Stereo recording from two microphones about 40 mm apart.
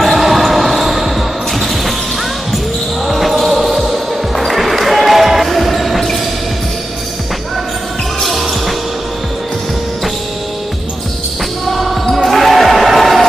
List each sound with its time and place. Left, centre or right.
0.0 s basketball bounce: centre
3.1 s basketball bounce: centre
8.2 s basketball bounce: centre
11.7 s basketball bounce: centre